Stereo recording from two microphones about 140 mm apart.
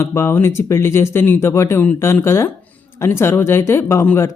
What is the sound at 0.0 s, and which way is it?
Speech, 20° left (ahead or behind).